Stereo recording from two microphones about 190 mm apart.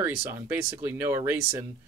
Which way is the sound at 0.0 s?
10° right (ahead or behind).